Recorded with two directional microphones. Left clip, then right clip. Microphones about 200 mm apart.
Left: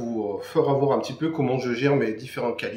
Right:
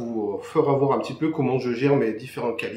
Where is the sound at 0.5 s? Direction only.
20° left (ahead or behind).